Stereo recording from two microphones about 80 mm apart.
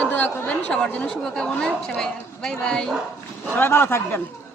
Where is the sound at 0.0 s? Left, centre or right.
Centre.